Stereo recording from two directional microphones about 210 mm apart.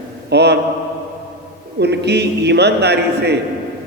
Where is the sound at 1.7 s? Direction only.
55° right (ahead or behind).